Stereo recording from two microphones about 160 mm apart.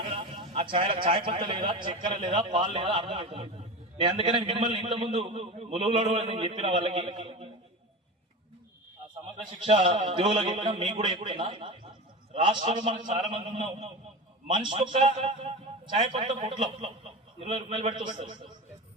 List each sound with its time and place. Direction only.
0.2 s a man's voice: 30° right (ahead or behind)
2.1 s a man's voice: 45° right (ahead or behind)
2.4 s a man's voice: 30° right (ahead or behind)
9.6 s a man's voice: 35° right (ahead or behind)